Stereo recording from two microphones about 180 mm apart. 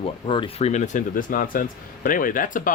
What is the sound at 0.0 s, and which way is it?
Speech, 30° left (ahead or behind).